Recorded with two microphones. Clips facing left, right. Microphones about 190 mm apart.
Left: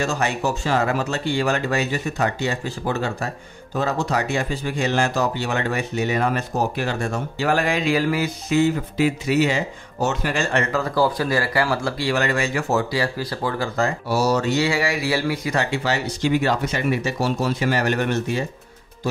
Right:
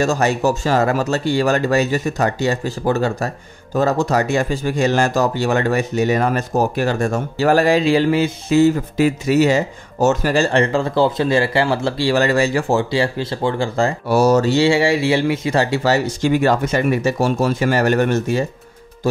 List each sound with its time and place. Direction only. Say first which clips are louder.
0.0 s speech: right 6 dB; 40° right (ahead or behind)
14.0 s speech: right 8 dB; 55° right (ahead or behind)
14.4 s speech: right 6 dB; 30° right (ahead or behind); by 18.4 s 45° right (ahead or behind)